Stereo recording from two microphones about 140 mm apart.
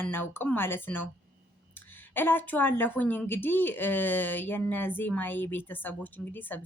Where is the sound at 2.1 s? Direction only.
15° left (ahead or behind).